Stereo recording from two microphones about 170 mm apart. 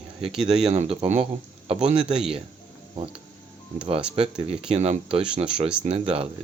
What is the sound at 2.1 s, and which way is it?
Speech, 5° right (ahead or behind).